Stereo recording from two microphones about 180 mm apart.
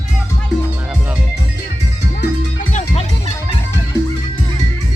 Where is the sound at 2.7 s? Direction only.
40° left (ahead or behind).